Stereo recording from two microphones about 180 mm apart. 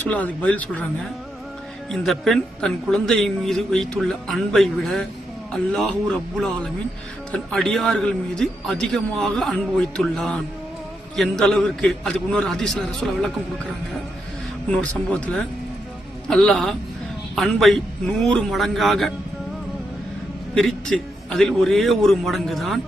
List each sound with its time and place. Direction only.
0.1 s speech: 10° left (ahead or behind)
14.7 s speech: 5° left (ahead or behind)
20.6 s speech: centre (ahead or behind)